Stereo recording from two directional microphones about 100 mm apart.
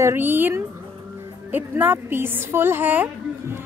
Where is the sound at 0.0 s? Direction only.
20° right (ahead or behind).